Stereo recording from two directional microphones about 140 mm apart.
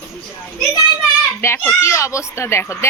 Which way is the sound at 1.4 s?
15° left (ahead or behind).